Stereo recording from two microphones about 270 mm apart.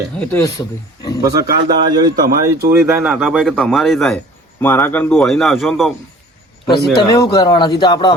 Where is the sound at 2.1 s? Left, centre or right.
Right.